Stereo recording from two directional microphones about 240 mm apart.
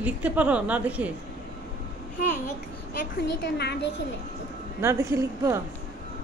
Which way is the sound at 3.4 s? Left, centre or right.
Left.